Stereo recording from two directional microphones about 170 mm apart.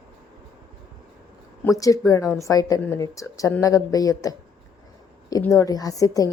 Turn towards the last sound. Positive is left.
turn(degrees=20)  # may be behind; listen again after turning